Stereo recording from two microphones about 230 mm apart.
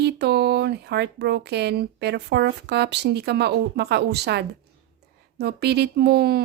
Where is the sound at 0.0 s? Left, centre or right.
Right.